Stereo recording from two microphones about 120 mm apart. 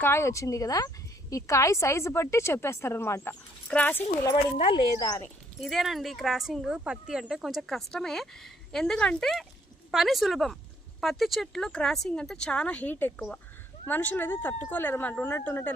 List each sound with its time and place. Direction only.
0.0 s a woman's voice: 20° left (ahead or behind)
4.5 s speech: 50° left (ahead or behind)
4.9 s speech: 35° left (ahead or behind)
5.5 s speech: centre (ahead or behind); by 15.7 s 15° left (ahead or behind)